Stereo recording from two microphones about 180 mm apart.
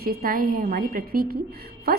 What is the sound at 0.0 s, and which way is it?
A woman's voice, 55° right (ahead or behind).